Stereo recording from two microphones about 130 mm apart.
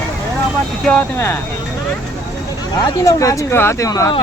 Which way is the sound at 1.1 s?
20° left (ahead or behind).